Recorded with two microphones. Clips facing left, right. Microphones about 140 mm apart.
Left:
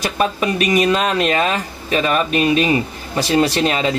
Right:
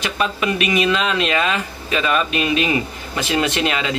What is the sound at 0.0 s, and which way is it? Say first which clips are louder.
Speech: left 3 dB; 40° left (ahead or behind).